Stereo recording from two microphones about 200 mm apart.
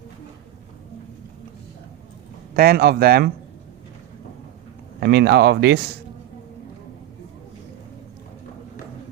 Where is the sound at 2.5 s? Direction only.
50° right (ahead or behind).